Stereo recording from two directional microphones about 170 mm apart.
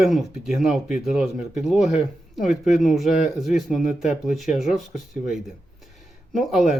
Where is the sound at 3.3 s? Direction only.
Centre (ahead or behind).